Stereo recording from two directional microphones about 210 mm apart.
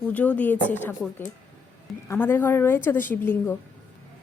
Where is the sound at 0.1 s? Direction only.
5° left (ahead or behind).